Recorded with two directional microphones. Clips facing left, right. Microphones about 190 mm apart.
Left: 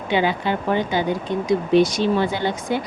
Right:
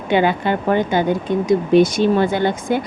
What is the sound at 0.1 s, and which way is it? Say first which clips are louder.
Speech: right 4 dB; 55° right (ahead or behind).